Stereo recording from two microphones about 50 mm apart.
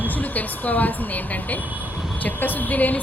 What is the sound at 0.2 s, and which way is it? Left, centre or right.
Speech, left.